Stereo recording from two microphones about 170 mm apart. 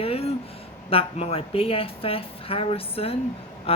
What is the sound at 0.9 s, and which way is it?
Speech, 35° left (ahead or behind).